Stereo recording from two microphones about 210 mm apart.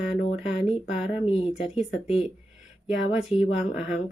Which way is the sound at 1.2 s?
30° left (ahead or behind).